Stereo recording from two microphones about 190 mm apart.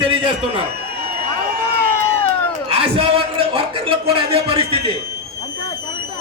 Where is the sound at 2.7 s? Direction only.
30° right (ahead or behind).